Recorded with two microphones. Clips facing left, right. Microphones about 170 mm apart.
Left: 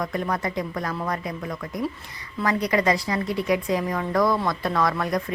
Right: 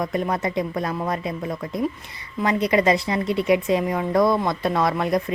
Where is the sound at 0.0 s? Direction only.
20° right (ahead or behind).